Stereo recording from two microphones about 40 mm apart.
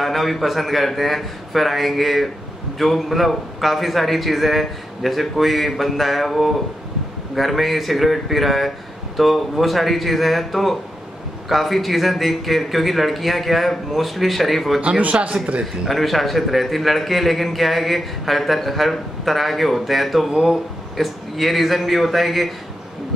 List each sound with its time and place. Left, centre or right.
0.0 s a man's voice: centre
14.8 s speech: right
15.9 s a man's voice: centre